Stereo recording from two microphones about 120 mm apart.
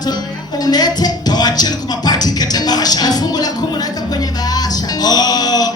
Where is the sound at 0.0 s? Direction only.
35° left (ahead or behind).